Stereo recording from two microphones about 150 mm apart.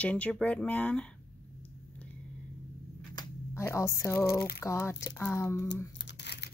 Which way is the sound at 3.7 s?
20° left (ahead or behind).